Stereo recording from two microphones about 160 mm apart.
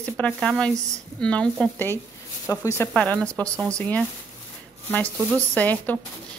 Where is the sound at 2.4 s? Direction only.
20° left (ahead or behind).